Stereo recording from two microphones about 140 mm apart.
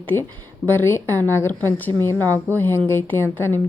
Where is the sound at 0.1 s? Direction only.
15° left (ahead or behind).